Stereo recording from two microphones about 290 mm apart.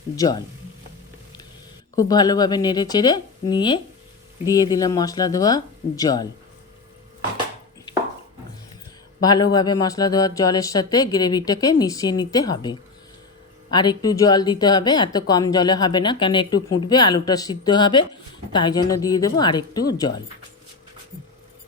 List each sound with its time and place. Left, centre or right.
0.2 s speech: centre
2.0 s speech: centre
9.2 s speech: centre